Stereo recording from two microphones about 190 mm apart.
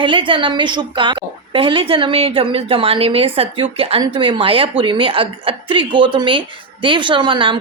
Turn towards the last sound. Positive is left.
turn(degrees=-25)  # may be behind; listen again after turning